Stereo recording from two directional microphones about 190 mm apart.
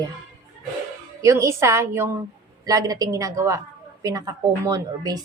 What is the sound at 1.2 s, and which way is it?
A woman's voice, 15° right (ahead or behind).